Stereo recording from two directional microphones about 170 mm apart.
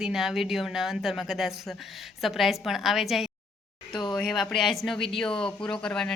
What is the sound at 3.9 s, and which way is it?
Speech, 25° left (ahead or behind).